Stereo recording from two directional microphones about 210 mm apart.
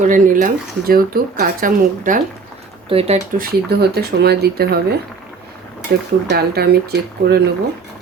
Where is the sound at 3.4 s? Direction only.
50° right (ahead or behind).